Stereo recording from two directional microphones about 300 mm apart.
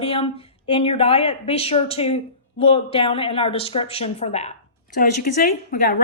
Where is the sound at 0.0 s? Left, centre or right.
Centre.